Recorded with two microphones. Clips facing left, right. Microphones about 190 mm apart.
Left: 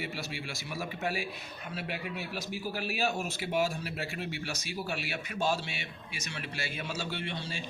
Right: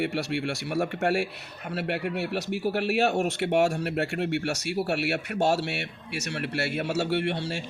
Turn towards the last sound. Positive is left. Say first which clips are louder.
# right 10 dB
turn(degrees=-70)  # may be behind; listen again after turning